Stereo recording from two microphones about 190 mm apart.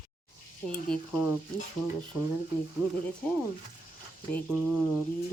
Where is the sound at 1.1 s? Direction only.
10° right (ahead or behind).